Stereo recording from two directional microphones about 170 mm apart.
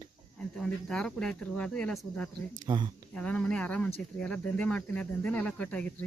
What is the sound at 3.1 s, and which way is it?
Speech, 5° left (ahead or behind).